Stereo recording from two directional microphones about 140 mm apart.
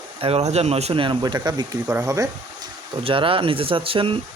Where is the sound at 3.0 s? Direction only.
40° right (ahead or behind).